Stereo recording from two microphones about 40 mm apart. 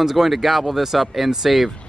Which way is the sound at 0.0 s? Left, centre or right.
Centre.